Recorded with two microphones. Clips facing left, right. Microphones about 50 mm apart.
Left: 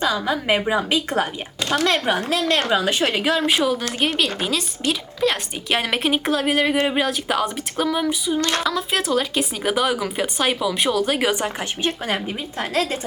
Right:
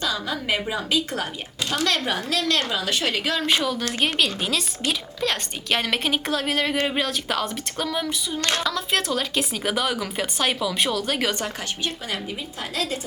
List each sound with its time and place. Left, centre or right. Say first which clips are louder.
0.0 s a woman's voice: left 5 dB; left
11.8 s speech: left 8 dB; left